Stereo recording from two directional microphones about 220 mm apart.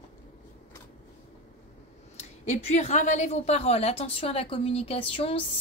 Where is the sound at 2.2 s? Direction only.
30° left (ahead or behind).